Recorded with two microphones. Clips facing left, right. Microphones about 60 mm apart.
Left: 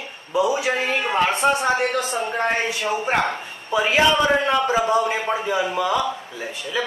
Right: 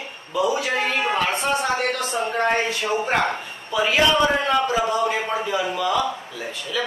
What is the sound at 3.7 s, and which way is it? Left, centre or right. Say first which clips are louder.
A man's voice: left 1 dB; left.